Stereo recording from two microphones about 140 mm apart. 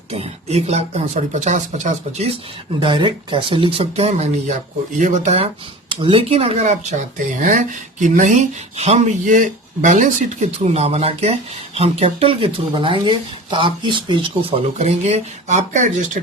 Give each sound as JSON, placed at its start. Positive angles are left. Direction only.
{"t": 0.1, "sound": "speech", "side_deg": -45}
{"t": 2.8, "sound": "speech", "side_deg": -35}
{"t": 4.9, "sound": "speech", "side_deg": -60}
{"t": 5.9, "sound": "speech", "side_deg": -40}